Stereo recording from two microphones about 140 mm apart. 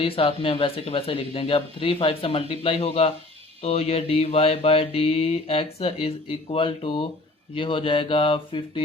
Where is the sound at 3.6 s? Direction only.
45° left (ahead or behind).